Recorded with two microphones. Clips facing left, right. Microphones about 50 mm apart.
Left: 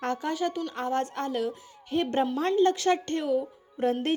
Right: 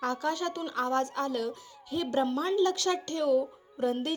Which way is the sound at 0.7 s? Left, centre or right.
Left.